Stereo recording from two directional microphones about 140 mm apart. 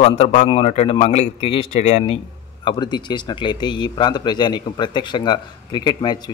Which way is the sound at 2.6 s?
35° left (ahead or behind).